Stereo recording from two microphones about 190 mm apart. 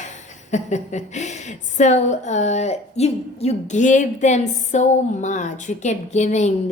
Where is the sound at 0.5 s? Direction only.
40° left (ahead or behind).